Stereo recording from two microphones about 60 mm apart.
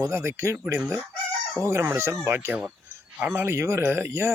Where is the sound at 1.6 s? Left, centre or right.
Right.